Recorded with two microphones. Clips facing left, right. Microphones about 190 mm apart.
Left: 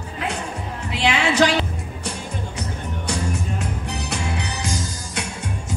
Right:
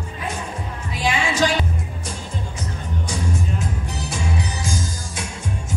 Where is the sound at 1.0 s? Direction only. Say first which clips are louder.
Left 3 dB; 65° left (ahead or behind).